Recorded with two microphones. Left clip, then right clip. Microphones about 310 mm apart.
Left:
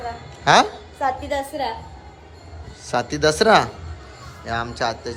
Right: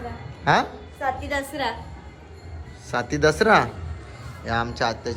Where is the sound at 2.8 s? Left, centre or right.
Centre.